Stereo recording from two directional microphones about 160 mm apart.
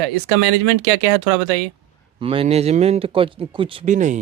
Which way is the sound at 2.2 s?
40° right (ahead or behind).